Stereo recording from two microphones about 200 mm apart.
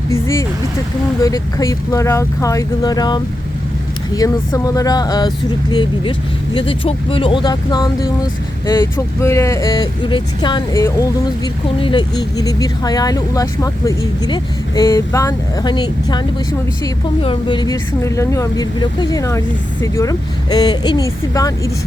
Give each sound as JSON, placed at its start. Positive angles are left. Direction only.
{"t": 0.1, "sound": "speech", "side_deg": 15}
{"t": 9.2, "sound": "speech", "side_deg": 15}
{"t": 17.2, "sound": "speech", "side_deg": 20}